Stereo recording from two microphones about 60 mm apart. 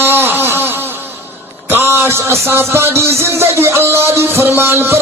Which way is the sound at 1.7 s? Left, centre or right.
Right.